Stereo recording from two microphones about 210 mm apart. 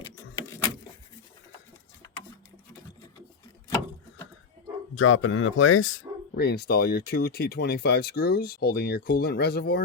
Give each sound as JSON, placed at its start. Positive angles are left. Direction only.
{"t": 0.0, "sound": "keys jangling", "side_deg": 15}
{"t": 4.9, "sound": "speech", "side_deg": 75}
{"t": 6.3, "sound": "speech", "side_deg": 50}